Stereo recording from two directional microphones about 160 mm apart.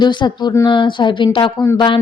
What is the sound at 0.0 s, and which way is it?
A woman's voice, 30° left (ahead or behind).